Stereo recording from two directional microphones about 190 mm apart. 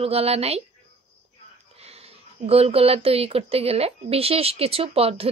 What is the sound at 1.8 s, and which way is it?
Speech, 30° right (ahead or behind).